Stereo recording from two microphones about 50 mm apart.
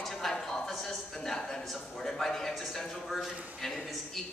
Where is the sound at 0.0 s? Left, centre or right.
Centre.